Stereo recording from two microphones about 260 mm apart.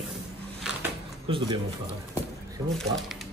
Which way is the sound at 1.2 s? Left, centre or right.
Centre.